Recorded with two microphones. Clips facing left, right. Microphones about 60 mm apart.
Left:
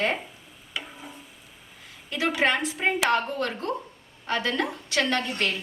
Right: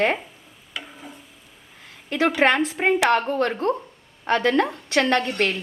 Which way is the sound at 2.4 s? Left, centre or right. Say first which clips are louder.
Right 4 dB; right.